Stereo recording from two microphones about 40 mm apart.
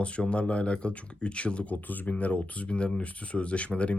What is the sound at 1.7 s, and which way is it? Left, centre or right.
Speech, left.